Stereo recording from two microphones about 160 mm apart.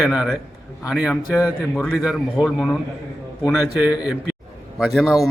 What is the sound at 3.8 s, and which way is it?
A man's voice, 5° right (ahead or behind).